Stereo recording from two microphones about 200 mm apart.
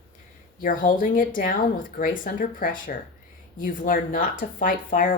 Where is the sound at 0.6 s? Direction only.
40° left (ahead or behind).